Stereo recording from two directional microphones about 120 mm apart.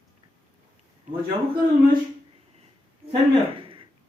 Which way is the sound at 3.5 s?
50° right (ahead or behind).